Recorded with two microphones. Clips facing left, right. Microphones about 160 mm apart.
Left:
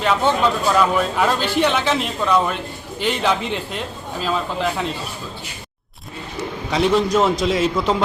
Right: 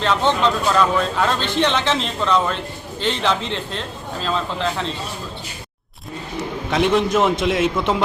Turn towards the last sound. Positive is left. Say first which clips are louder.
# even
turn(degrees=0)  # may be behind; listen again after turning